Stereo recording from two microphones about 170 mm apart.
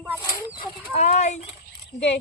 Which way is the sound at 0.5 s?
40° left (ahead or behind).